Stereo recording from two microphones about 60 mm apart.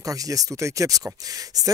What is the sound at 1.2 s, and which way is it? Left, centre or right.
Speech, right.